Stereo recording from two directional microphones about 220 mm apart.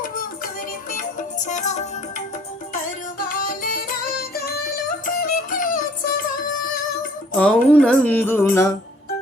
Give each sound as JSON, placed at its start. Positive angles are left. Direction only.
{"t": 0.0, "sound": "music", "side_deg": 40}
{"t": 7.3, "sound": "music", "side_deg": 5}